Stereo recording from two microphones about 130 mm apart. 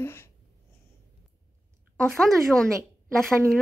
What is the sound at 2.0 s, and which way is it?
Speech, centre (ahead or behind).